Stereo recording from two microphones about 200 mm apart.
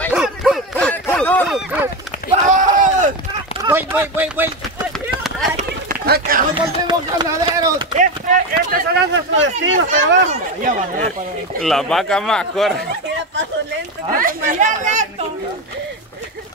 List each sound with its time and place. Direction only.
0.1 s dog: centre (ahead or behind)
2.3 s a sound: 40° right (ahead or behind)
3.6 s run: 10° right (ahead or behind)
5.6 s run: 50° right (ahead or behind)
6.5 s run: 20° right (ahead or behind)
8.0 s run: 40° right (ahead or behind)
9.1 s speech: 70° right (ahead or behind)
11.6 s speech: centre (ahead or behind)
14.1 s speech: 40° right (ahead or behind)